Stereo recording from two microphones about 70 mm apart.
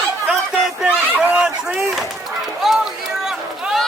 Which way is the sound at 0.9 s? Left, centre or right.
Right.